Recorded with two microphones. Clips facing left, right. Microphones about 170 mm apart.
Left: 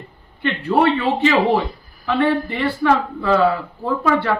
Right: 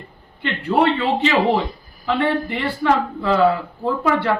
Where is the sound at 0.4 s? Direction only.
15° right (ahead or behind).